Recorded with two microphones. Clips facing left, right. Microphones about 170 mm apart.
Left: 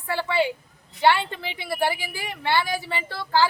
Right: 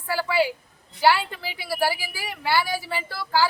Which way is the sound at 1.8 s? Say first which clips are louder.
Even; 5° right (ahead or behind).